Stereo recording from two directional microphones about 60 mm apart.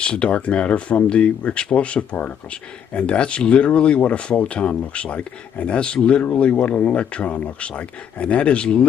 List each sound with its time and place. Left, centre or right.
0.0 s speech: centre